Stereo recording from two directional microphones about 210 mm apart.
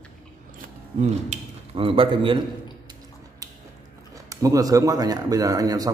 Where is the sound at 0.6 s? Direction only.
35° right (ahead or behind).